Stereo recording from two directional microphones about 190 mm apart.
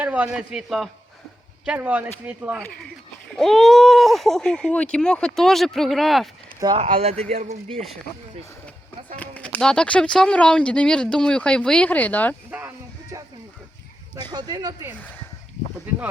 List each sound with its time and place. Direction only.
0.0 s a sound: 5° right (ahead or behind)
0.3 s speech: centre (ahead or behind)
6.6 s speech: 25° right (ahead or behind)
9.1 s speech: 5° left (ahead or behind)
12.5 s music: 10° right (ahead or behind)
14.2 s speech: 20° right (ahead or behind)
14.9 s speech: 10° left (ahead or behind)